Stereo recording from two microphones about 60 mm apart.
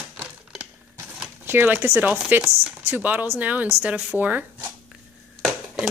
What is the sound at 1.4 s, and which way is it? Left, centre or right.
Speech, right.